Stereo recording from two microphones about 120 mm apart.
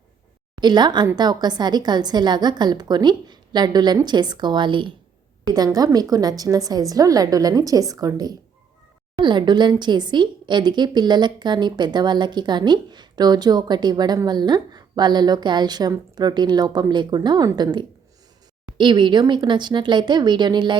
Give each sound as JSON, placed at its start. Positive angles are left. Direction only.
{"t": 0.6, "sound": "a woman's voice", "side_deg": -35}
{"t": 5.5, "sound": "a woman's voice", "side_deg": -30}